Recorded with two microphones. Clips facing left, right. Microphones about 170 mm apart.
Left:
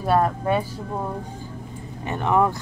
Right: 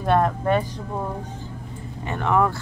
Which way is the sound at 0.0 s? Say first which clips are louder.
Even; 5° left (ahead or behind).